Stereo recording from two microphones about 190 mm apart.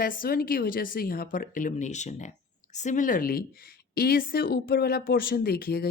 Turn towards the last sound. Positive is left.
turn(degrees=50)  # may be behind; listen again after turning